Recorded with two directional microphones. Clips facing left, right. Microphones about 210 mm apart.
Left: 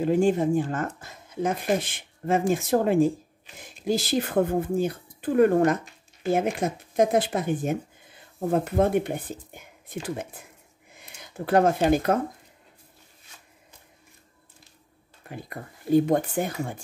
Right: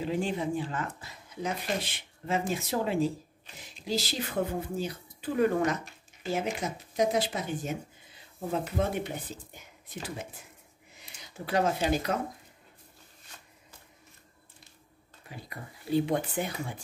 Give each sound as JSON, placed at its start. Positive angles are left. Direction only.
{"t": 0.0, "sound": "speech", "side_deg": 45}
{"t": 10.9, "sound": "a sound", "side_deg": 55}
{"t": 15.2, "sound": "speech", "side_deg": 50}